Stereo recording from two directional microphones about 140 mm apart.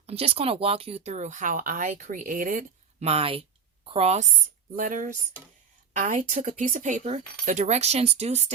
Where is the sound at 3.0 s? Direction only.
45° right (ahead or behind).